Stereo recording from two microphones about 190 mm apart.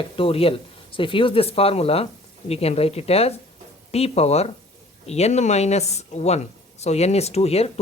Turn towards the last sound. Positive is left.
turn(degrees=35)  # may be behind; listen again after turning